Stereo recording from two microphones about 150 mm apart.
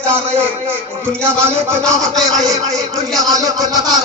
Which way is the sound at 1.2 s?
15° right (ahead or behind).